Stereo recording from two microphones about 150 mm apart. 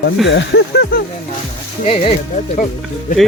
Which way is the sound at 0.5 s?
90° left.